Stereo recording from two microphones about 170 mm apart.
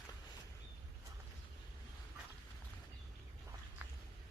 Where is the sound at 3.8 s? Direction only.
10° right (ahead or behind).